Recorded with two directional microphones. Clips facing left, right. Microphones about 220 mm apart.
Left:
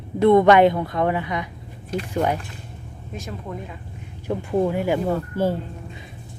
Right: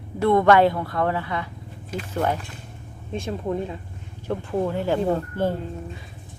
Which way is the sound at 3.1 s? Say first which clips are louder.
Right 6 dB; 30° right (ahead or behind).